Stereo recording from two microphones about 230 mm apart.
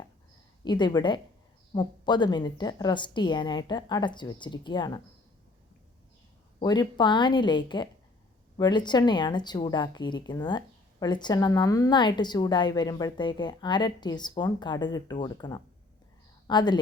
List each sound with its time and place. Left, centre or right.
0.6 s a woman's voice: centre
6.6 s a woman's voice: centre